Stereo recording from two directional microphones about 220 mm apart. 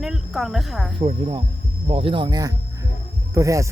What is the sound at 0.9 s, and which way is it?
Speech, 25° right (ahead or behind).